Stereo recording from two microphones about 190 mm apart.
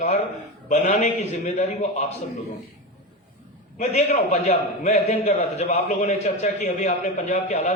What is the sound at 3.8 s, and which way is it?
A man's voice, 35° left (ahead or behind).